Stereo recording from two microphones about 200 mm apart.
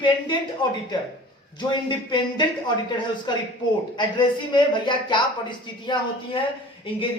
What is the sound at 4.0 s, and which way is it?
A man's voice, 25° left (ahead or behind).